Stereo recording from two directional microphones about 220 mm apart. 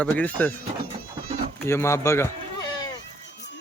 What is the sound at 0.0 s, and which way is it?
Speech, 5° left (ahead or behind).